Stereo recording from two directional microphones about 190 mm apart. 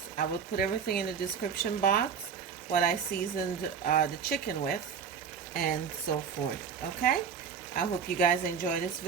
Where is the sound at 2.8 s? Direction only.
50° left (ahead or behind).